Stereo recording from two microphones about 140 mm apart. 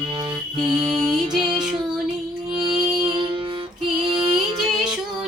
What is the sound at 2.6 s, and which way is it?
Music, 35° right (ahead or behind).